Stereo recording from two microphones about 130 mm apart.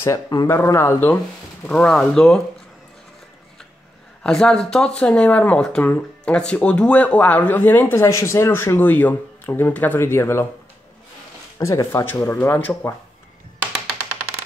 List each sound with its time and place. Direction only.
0.0 s speech: 25° left (ahead or behind); by 2.4 s 5° left (ahead or behind)
4.2 s speech: 5° left (ahead or behind)
11.5 s speech: 25° left (ahead or behind)